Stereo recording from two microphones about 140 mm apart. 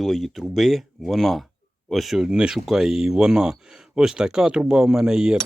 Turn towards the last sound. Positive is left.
turn(degrees=-5)  # may be behind; listen again after turning